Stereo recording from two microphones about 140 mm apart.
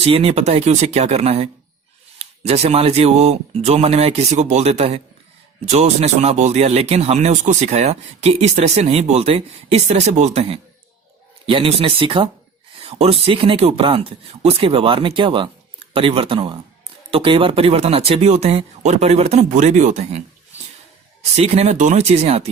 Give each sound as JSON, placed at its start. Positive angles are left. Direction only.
{"t": 0.0, "sound": "speech", "side_deg": -45}
{"t": 11.4, "sound": "speech", "side_deg": -40}
{"t": 21.3, "sound": "speech", "side_deg": -50}